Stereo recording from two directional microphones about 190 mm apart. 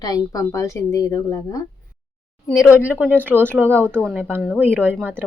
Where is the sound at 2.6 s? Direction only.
10° left (ahead or behind).